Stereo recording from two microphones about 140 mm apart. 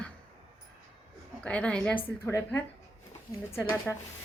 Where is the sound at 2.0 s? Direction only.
20° left (ahead or behind).